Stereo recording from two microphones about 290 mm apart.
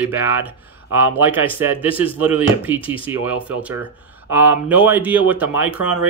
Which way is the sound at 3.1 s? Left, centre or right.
Centre.